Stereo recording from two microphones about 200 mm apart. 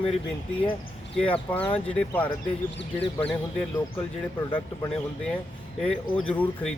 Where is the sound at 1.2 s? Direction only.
5° left (ahead or behind).